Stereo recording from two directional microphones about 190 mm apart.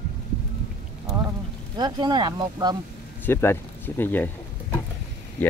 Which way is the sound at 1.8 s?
20° right (ahead or behind).